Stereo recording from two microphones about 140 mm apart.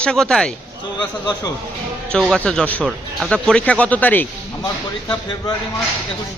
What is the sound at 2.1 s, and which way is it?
Speech, 5° left (ahead or behind).